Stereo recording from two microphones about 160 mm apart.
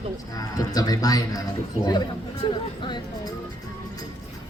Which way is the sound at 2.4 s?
30° left (ahead or behind).